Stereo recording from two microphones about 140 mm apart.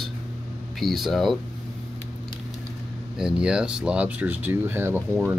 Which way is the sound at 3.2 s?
5° right (ahead or behind).